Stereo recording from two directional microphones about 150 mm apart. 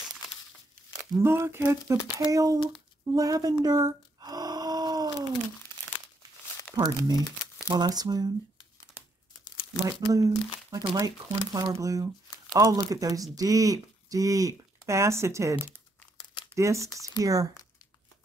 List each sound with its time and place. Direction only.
1.1 s speech: 20° right (ahead or behind)
3.2 s a sound: 25° right (ahead or behind)
6.7 s speech: 25° right (ahead or behind)
9.8 s speech: 25° right (ahead or behind)